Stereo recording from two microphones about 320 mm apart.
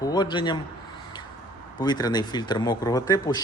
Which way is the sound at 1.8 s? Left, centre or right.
Centre.